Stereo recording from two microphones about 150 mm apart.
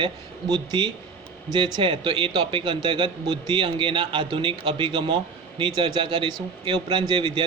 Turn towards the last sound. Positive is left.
turn(degrees=-30)  # may be behind; listen again after turning